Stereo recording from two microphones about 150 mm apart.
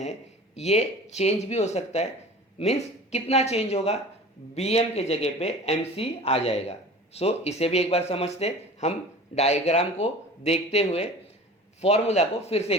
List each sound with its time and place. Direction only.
0.0 s speech: 45° left (ahead or behind)